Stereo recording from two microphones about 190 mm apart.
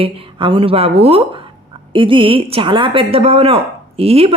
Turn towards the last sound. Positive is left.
turn(degrees=-30)  # may be behind; listen again after turning